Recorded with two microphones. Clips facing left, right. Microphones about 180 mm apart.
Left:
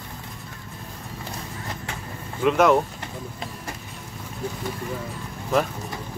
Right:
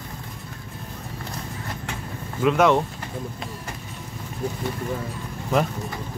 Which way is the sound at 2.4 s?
Centre (ahead or behind).